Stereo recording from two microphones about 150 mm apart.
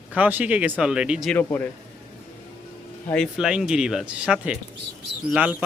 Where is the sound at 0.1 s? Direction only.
10° right (ahead or behind).